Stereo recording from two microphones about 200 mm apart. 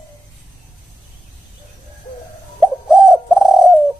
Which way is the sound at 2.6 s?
5° right (ahead or behind).